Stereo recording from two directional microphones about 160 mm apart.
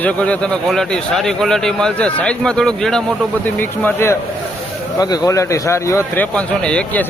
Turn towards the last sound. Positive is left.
turn(degrees=10)  # may be behind; listen again after turning